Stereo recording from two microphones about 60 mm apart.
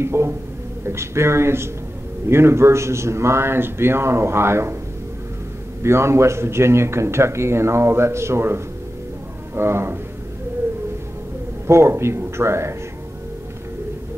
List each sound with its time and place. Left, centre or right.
0.0 s speech: right
5.8 s speech: right
11.6 s speech: right